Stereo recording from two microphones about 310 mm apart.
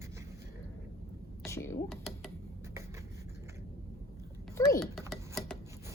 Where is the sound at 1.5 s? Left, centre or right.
Centre.